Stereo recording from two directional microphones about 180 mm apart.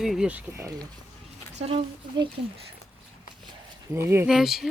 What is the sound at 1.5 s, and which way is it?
Speech, 35° right (ahead or behind).